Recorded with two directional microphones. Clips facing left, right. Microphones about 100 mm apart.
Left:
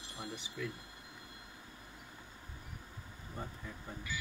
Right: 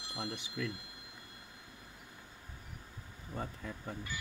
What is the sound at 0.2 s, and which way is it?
Speech, 70° right (ahead or behind).